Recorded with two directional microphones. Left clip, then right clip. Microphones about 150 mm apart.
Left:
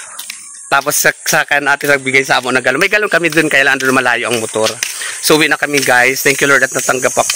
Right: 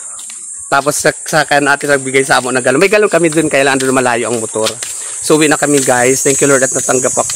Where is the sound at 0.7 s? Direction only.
Centre (ahead or behind); by 1.9 s 15° left (ahead or behind).